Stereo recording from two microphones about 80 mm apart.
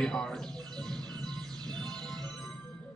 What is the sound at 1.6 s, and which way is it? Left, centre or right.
Music, right.